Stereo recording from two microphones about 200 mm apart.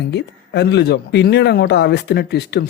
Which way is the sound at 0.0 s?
60° left (ahead or behind).